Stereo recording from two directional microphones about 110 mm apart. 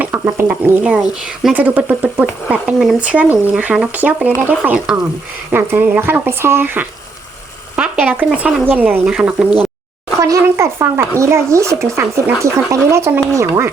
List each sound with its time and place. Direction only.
0.0 s chicken: 20° right (ahead or behind)
1.5 s speech: 15° right (ahead or behind)
9.0 s speech: 5° right (ahead or behind)
10.2 s speech: 30° right (ahead or behind)